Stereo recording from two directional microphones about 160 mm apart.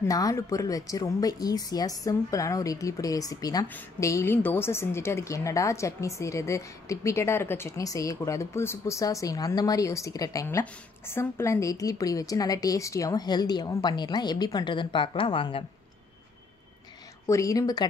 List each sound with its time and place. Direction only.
0.0 s a woman's voice: 20° left (ahead or behind)
17.3 s a woman's voice: 20° left (ahead or behind)